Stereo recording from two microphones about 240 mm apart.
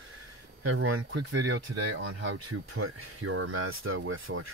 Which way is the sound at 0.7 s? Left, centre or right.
Right.